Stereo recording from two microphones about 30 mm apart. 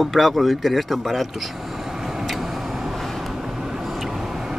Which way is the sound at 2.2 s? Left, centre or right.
Centre.